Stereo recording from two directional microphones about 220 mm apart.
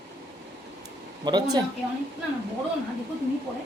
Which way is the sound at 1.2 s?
20° right (ahead or behind).